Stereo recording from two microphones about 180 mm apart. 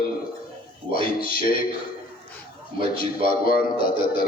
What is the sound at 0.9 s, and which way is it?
Speech, 55° left (ahead or behind).